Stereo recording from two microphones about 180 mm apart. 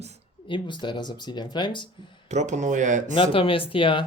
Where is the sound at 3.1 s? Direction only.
30° left (ahead or behind).